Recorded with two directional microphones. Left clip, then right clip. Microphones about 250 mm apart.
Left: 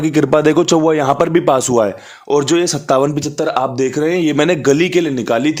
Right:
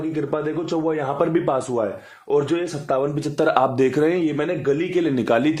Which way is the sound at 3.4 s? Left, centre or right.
Centre.